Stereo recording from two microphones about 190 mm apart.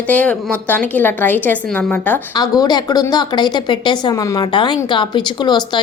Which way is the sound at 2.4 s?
20° left (ahead or behind).